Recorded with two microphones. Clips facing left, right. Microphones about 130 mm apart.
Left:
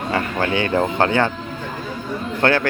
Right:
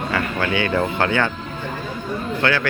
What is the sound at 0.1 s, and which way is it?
Speech, 35° left (ahead or behind).